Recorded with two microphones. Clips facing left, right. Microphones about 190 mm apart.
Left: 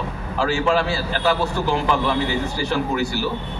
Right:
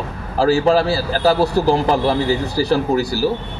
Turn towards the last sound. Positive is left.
turn(degrees=-35)  # may be behind; listen again after turning